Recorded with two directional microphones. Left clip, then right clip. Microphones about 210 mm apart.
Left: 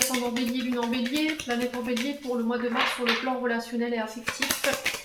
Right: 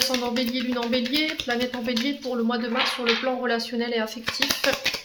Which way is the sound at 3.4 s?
45° right (ahead or behind).